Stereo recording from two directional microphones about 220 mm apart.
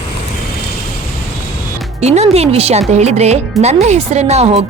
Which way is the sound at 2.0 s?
30° right (ahead or behind).